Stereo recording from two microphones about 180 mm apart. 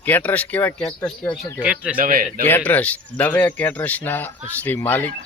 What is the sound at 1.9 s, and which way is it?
Speech, 50° right (ahead or behind).